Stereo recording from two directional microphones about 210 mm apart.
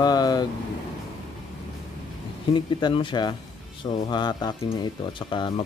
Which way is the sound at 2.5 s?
20° left (ahead or behind).